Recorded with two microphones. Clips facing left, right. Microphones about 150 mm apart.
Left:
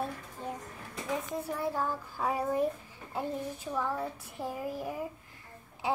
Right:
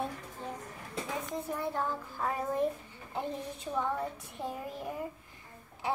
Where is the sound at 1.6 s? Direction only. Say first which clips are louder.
Left 2 dB; 10° left (ahead or behind).